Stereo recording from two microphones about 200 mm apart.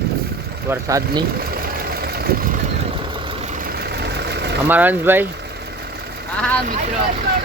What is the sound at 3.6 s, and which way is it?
Vehicle, 50° right (ahead or behind).